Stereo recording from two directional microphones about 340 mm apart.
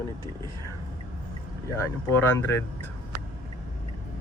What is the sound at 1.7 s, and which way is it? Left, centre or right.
Speech, centre.